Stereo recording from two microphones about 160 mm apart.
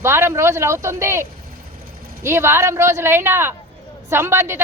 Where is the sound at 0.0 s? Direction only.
15° right (ahead or behind).